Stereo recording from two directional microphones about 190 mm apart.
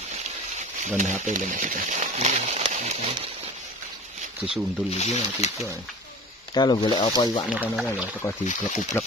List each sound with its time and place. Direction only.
0.6 s speech: 40° right (ahead or behind)
4.5 s speech: 35° left (ahead or behind)
6.5 s speech: 20° left (ahead or behind)
7.4 s speech: 5° right (ahead or behind)
9.0 s speech: 10° left (ahead or behind)